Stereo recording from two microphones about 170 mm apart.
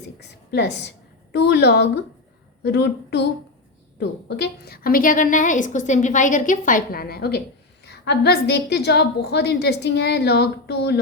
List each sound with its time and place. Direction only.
0.2 s a woman's voice: 80° left
4.3 s a woman's voice: 70° left (ahead or behind)